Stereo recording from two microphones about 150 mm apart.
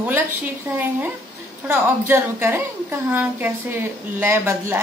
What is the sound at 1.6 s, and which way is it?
A woman's voice, 15° right (ahead or behind).